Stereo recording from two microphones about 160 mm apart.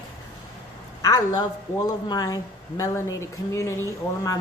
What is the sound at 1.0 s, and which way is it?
A woman's voice, 20° left (ahead or behind).